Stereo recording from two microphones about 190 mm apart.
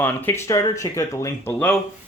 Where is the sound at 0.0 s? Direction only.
15° left (ahead or behind).